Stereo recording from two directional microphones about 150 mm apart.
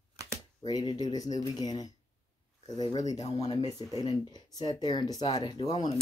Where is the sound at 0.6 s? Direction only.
25° left (ahead or behind).